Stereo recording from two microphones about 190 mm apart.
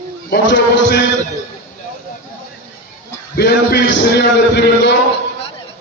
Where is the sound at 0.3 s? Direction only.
65° left (ahead or behind).